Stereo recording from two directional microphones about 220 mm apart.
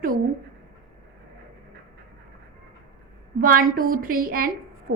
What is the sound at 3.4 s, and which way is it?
A woman's voice, 40° right (ahead or behind).